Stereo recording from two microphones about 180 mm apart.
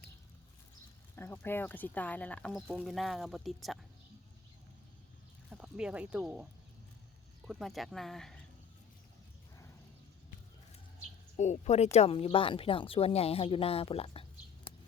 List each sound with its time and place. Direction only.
1.1 s speech: 10° left (ahead or behind)
5.5 s speech: 5° right (ahead or behind)
11.3 s speech: 40° left (ahead or behind)